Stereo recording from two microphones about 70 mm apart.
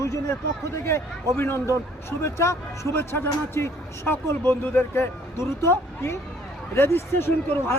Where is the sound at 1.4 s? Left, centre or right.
Left.